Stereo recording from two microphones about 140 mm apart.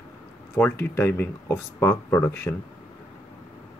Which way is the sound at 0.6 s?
15° left (ahead or behind).